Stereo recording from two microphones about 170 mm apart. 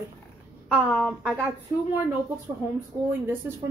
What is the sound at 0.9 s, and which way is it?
Speech, centre (ahead or behind).